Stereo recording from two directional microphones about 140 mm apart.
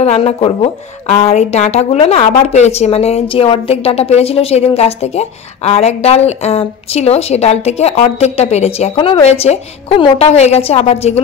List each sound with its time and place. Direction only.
0.0 s a woman's voice: 45° left (ahead or behind)